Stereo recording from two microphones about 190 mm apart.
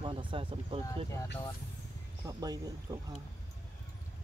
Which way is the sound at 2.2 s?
20° right (ahead or behind).